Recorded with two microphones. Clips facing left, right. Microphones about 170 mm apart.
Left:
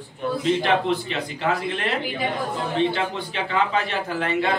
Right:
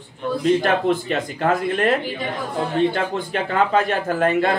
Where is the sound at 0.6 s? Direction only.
45° right (ahead or behind).